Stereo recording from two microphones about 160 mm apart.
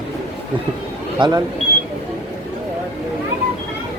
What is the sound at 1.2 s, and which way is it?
Speech, 25° right (ahead or behind).